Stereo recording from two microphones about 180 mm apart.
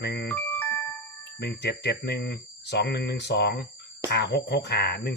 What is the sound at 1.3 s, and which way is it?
Speech, 65° left (ahead or behind).